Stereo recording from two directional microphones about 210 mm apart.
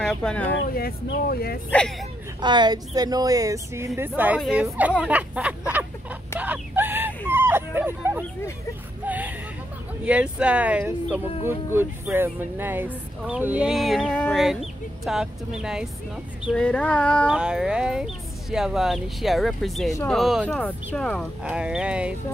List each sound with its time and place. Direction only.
0.0 s speech: 5° left (ahead or behind)
0.7 s speech: 45° left (ahead or behind)
1.7 s speech: 5° left (ahead or behind)
2.4 s speech: 20° right (ahead or behind)
6.4 s a sound: 10° right (ahead or behind)
10.0 s speech: 5° right (ahead or behind)